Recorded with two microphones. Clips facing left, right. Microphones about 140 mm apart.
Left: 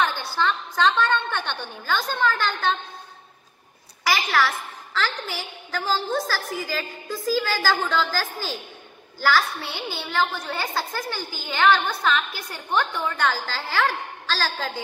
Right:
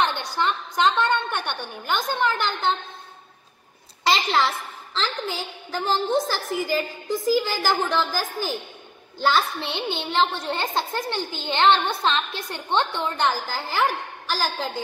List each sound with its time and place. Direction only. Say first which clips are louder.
0.0 s a woman's voice: even; 20° right (ahead or behind)
4.0 s a child's voice: right 1 dB; 25° right (ahead or behind)